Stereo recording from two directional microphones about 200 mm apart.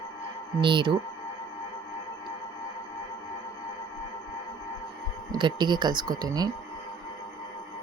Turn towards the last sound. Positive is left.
turn(degrees=-20)  # may be behind; listen again after turning